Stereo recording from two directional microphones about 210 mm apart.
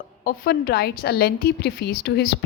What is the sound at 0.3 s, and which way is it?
Speech, 45° left (ahead or behind).